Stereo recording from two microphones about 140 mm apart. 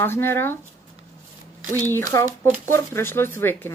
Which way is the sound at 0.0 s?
15° left (ahead or behind).